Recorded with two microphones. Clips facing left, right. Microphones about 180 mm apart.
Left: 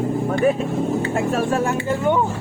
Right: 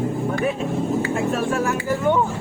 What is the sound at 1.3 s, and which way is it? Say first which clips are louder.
Speech: left 2 dB; 35° left (ahead or behind).